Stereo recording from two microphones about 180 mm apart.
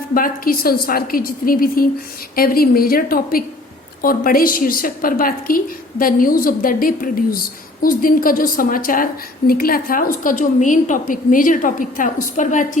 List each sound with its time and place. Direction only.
0.1 s a woman's voice: 50° left (ahead or behind)